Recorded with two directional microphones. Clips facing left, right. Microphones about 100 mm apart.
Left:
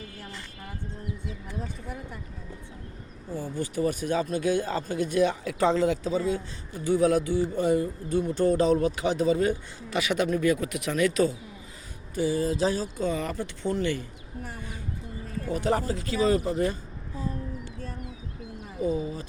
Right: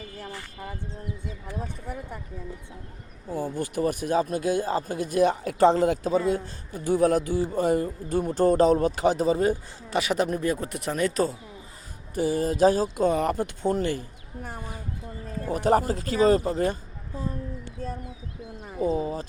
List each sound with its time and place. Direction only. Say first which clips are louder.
3.2 s speech: right 3 dB; 50° right (ahead or behind)
12.1 s speech: right 1 dB; 50° right (ahead or behind)
15.4 s speech: right 4 dB; 45° right (ahead or behind)
16.4 s speech: right 1 dB; 30° right (ahead or behind)
18.8 s speech: right 3 dB; 40° right (ahead or behind)